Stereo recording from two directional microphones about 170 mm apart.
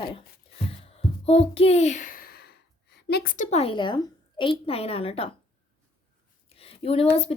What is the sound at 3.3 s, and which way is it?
A woman's voice, 40° left (ahead or behind).